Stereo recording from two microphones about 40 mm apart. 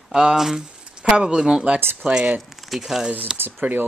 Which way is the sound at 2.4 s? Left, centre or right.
Centre.